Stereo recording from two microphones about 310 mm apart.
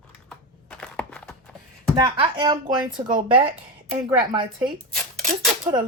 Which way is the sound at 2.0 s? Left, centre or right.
Centre.